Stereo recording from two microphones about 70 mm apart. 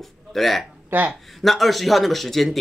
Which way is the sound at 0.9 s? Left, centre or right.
Right.